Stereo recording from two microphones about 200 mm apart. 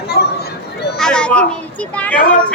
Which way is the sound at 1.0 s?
5° left (ahead or behind).